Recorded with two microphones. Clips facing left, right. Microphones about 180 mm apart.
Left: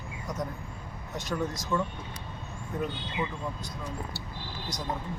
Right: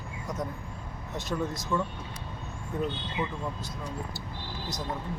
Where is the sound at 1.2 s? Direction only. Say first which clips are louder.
Even; centre (ahead or behind).